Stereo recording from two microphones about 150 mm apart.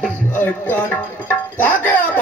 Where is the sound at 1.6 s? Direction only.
10° left (ahead or behind).